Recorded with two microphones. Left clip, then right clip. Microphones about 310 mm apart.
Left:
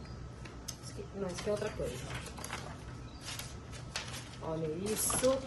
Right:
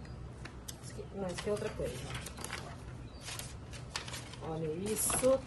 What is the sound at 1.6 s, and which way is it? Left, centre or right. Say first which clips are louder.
Speech: left 1 dB; centre.